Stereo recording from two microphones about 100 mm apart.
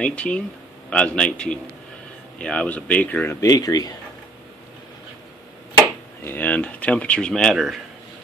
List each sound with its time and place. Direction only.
0.0 s speech: 10° left (ahead or behind)
3.3 s speech: 35° left (ahead or behind)
6.2 s speech: 15° left (ahead or behind); by 7.8 s centre (ahead or behind)